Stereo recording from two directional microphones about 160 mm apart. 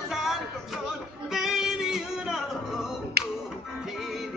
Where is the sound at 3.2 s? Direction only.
90° right.